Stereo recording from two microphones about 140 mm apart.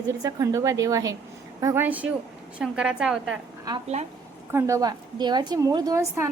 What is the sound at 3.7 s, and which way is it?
A woman's voice, 30° right (ahead or behind).